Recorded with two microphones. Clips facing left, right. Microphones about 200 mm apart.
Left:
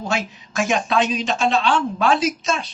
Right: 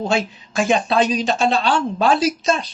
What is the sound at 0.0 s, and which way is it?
Speech, 30° right (ahead or behind).